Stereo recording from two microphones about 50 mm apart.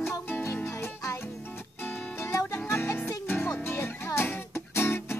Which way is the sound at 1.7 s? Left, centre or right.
Left.